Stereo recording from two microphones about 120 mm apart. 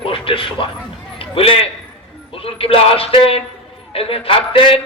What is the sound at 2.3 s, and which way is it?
A man's voice, 50° left (ahead or behind).